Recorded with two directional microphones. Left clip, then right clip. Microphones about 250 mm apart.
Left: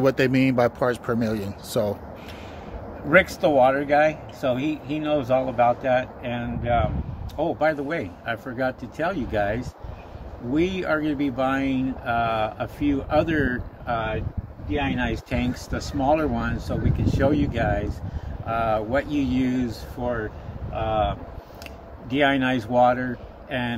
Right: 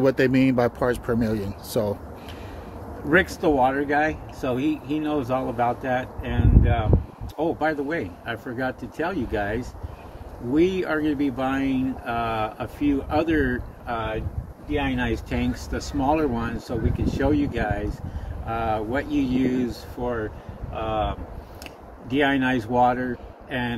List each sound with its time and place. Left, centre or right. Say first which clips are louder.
0.0 s speech: even; centre
3.1 s speech: left 2 dB; centre
22.1 s speech: left 1 dB; centre